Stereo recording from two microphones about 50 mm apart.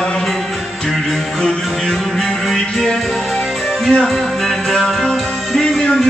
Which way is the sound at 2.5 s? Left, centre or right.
Centre.